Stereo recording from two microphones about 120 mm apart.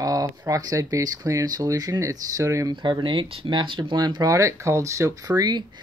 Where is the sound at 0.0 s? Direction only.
30° right (ahead or behind).